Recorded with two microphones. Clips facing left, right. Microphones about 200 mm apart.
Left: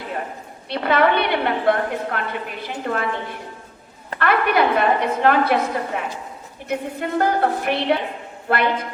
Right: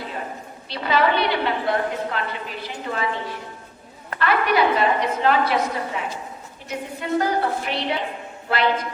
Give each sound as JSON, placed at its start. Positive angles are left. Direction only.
{"t": 0.7, "sound": "a woman's voice", "side_deg": 55}